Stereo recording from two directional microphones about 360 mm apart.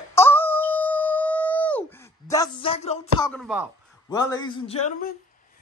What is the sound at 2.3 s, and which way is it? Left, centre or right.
Music, centre.